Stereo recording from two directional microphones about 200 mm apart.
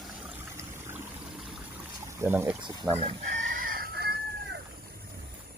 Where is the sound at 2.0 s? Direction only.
15° right (ahead or behind).